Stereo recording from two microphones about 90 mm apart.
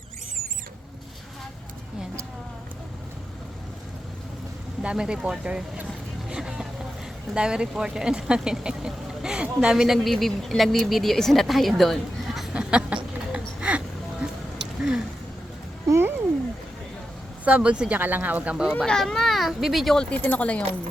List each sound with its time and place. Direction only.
4.8 s speech: 10° right (ahead or behind)
6.2 s vehicle: 5° right (ahead or behind)
7.3 s speech: 10° right (ahead or behind)
11.8 s a sound: centre (ahead or behind)
15.9 s cat: 25° right (ahead or behind)
17.4 s speech: 15° right (ahead or behind)
18.9 s speech: 5° left (ahead or behind)